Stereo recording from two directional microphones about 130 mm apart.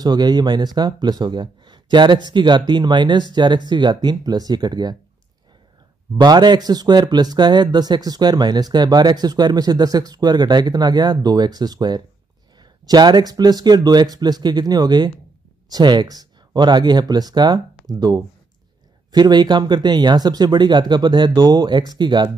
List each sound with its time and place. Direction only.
0.0 s speech: 30° right (ahead or behind)
6.1 s speech: 35° right (ahead or behind)